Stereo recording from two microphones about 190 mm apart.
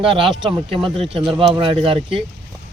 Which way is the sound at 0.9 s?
30° right (ahead or behind).